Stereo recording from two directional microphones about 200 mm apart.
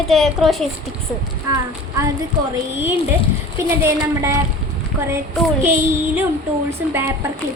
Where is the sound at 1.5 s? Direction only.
15° right (ahead or behind).